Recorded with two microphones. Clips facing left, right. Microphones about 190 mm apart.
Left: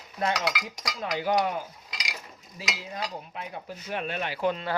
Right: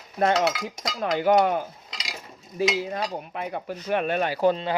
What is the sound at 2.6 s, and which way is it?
Speech, 55° right (ahead or behind).